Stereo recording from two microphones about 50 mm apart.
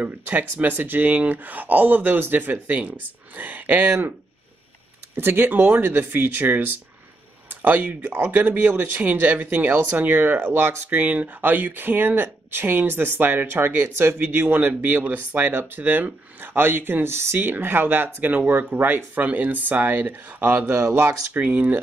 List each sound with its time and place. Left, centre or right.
0.0 s speech: right
5.1 s speech: right
10.9 s speech: right
13.8 s speech: right
14.2 s speech: right